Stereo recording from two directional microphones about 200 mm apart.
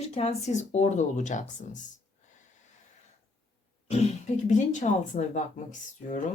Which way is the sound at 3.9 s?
35° left (ahead or behind).